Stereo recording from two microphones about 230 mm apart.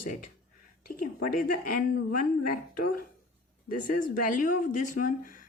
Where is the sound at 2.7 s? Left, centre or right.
Left.